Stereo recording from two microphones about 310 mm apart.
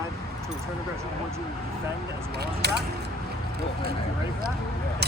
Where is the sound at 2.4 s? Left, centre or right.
Right.